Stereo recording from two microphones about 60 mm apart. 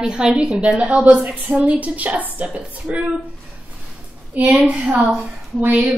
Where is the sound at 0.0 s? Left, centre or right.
Centre.